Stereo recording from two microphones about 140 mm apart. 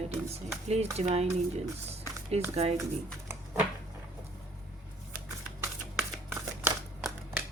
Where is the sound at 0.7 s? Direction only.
50° right (ahead or behind).